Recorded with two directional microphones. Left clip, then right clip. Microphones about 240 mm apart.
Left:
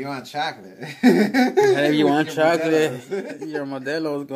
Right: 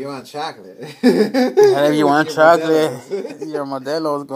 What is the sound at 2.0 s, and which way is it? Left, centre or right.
Speech, right.